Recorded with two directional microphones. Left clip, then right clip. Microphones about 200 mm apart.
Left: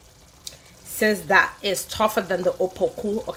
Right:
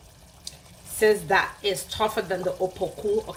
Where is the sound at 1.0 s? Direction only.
50° left (ahead or behind).